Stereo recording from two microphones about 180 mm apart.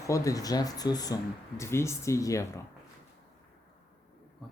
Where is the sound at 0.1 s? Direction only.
20° left (ahead or behind).